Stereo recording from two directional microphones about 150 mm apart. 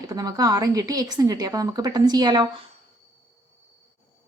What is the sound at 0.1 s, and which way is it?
A woman's voice, 25° right (ahead or behind).